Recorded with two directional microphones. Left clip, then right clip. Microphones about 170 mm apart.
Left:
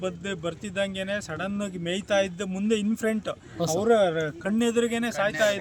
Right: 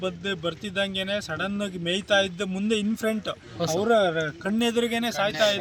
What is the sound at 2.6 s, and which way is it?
Speech, 10° left (ahead or behind).